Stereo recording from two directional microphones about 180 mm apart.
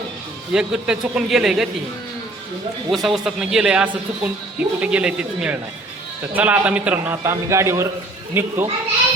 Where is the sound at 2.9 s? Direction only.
Centre (ahead or behind).